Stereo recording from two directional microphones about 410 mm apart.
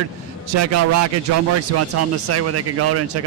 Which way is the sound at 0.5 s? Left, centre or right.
Right.